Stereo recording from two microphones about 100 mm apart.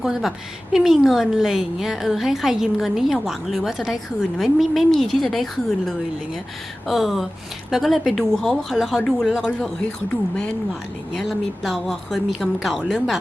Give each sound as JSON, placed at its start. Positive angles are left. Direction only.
{"t": 0.0, "sound": "a woman's voice", "side_deg": -5}